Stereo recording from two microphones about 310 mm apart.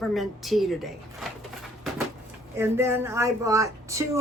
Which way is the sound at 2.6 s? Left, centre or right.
Centre.